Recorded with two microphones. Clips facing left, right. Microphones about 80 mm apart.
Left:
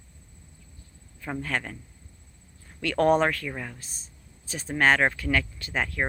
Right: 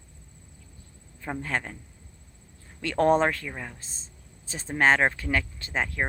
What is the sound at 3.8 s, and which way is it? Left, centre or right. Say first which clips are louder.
Speech: even; right.